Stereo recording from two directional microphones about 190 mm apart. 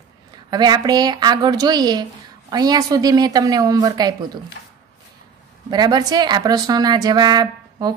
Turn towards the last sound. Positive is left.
turn(degrees=-20)  # may be behind; listen again after turning